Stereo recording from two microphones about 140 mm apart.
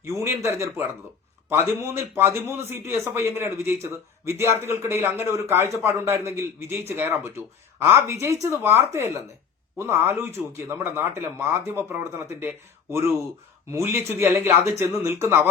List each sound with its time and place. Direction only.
0.0 s a man's voice: 20° right (ahead or behind)